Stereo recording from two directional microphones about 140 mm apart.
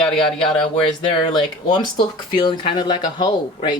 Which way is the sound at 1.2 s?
30° left (ahead or behind).